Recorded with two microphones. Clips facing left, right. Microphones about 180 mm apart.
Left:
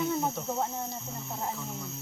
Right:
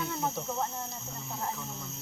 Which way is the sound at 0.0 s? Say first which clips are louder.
Left 5 dB; 15° left (ahead or behind).